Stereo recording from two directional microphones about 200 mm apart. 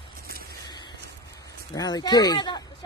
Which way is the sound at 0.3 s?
50° right (ahead or behind).